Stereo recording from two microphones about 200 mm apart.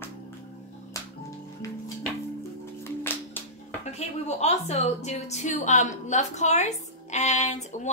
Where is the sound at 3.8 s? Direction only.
35° left (ahead or behind).